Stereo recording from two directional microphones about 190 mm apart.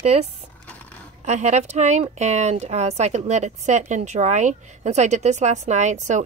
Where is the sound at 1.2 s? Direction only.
35° right (ahead or behind).